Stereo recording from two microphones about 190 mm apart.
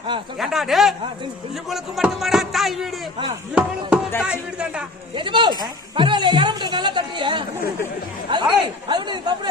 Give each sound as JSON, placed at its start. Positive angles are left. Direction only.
{"t": 0.3, "sound": "speech", "side_deg": 0}
{"t": 3.5, "sound": "chop", "side_deg": -5}
{"t": 4.2, "sound": "speech", "side_deg": -5}
{"t": 5.1, "sound": "speech", "side_deg": -25}